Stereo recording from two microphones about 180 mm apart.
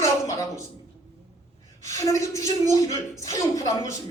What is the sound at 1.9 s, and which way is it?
A man's voice, 20° left (ahead or behind).